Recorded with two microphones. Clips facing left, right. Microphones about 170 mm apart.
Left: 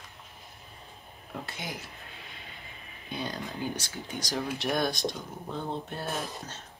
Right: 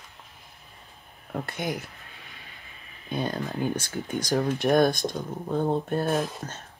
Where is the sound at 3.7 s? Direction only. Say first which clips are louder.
Right 7 dB; 55° right (ahead or behind).